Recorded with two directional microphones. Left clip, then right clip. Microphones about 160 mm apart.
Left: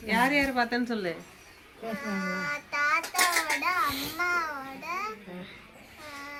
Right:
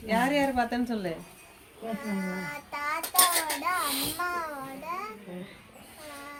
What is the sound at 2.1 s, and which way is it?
Speech, 10° left (ahead or behind).